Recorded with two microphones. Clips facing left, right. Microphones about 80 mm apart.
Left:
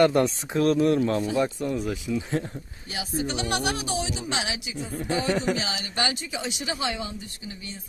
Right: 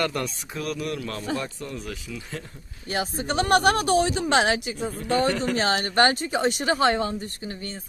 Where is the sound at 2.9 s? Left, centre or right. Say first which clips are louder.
Right 3 dB; right.